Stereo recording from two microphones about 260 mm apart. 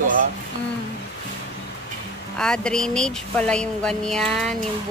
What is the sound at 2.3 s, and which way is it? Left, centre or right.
Speech, centre.